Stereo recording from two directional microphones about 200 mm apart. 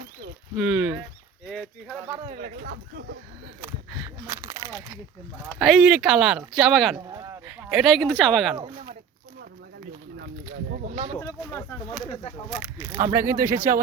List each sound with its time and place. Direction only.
0.5 s speech: 5° right (ahead or behind)
2.3 s speech: 40° right (ahead or behind)
4.3 s speech: 15° right (ahead or behind)
5.5 s speech: centre (ahead or behind)
7.1 s a sound: 20° right (ahead or behind)
7.4 s speech: 5° right (ahead or behind)
10.7 s a sound: 45° right (ahead or behind)
11.2 s speech: 15° left (ahead or behind)
12.5 s speech: 5° right (ahead or behind)